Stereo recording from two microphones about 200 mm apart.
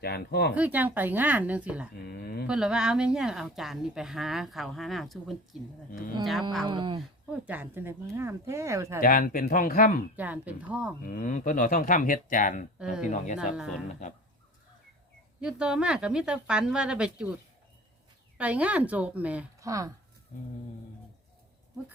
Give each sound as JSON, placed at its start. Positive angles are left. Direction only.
{"t": 0.0, "sound": "speech", "side_deg": 55}
{"t": 0.5, "sound": "speech", "side_deg": -10}
{"t": 2.0, "sound": "a sound", "side_deg": 55}
{"t": 2.5, "sound": "a woman's voice", "side_deg": -5}
{"t": 6.7, "sound": "speech", "side_deg": -25}
{"t": 7.4, "sound": "speech", "side_deg": -10}
{"t": 9.0, "sound": "speech", "side_deg": 45}
{"t": 10.2, "sound": "speech", "side_deg": -10}
{"t": 11.0, "sound": "speech", "side_deg": 40}
{"t": 12.8, "sound": "a woman's voice", "side_deg": -5}
{"t": 13.1, "sound": "speech", "side_deg": 35}
{"t": 13.6, "sound": "a woman's voice", "side_deg": 0}
{"t": 15.4, "sound": "a woman's voice", "side_deg": -5}
{"t": 18.3, "sound": "speech", "side_deg": -5}